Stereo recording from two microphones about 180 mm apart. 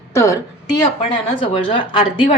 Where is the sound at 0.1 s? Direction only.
15° left (ahead or behind).